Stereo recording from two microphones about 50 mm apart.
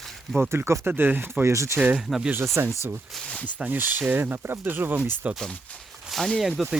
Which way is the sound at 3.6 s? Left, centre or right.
Right.